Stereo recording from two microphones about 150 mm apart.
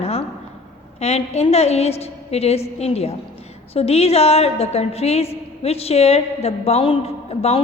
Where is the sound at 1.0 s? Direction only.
45° left (ahead or behind).